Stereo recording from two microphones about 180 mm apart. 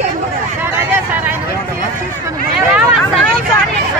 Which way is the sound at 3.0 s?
5° left (ahead or behind).